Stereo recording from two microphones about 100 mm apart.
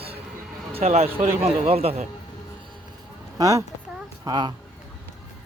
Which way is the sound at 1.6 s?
85° right.